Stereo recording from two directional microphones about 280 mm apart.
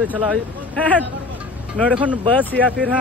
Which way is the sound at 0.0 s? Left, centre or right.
Centre.